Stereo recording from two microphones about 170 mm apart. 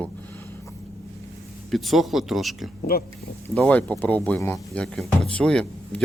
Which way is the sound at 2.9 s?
60° left (ahead or behind).